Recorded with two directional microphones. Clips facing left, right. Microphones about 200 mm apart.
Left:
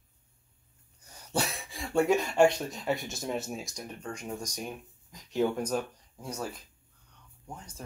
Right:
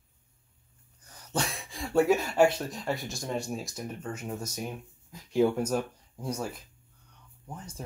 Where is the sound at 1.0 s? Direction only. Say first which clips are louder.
Even; 10° left (ahead or behind).